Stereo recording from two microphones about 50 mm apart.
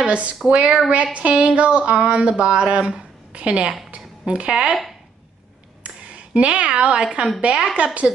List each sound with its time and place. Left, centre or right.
0.0 s speech: right
5.9 s speech: right